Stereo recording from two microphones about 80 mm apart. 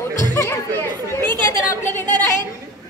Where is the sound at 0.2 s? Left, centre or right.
Left.